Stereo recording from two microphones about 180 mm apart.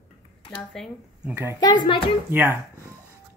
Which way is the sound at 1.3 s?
15° right (ahead or behind).